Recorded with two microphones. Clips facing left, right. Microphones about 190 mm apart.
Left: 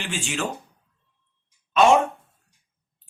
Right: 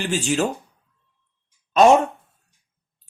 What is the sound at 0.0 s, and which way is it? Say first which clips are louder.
Speech: right 8 dB; 40° right (ahead or behind).